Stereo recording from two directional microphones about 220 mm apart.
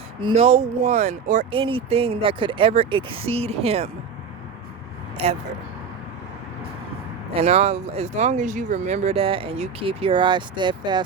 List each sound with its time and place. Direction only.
0.2 s speech: 25° right (ahead or behind)
5.2 s speech: 30° right (ahead or behind)
7.3 s speech: 30° right (ahead or behind)